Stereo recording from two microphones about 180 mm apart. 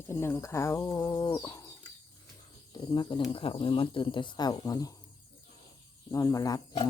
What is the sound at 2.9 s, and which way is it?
Speech, 25° left (ahead or behind).